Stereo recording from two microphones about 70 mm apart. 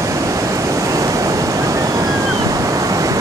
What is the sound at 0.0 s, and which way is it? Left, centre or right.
Waves, right.